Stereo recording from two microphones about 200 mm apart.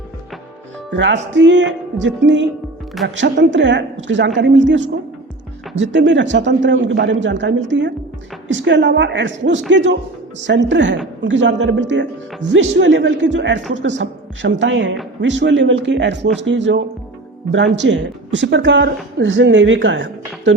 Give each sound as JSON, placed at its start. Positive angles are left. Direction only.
{"t": 0.9, "sound": "speech", "side_deg": -60}